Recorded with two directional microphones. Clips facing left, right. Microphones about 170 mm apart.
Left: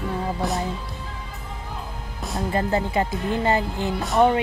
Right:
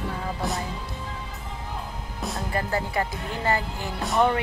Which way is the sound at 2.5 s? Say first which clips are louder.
Left 5 dB; 20° left (ahead or behind).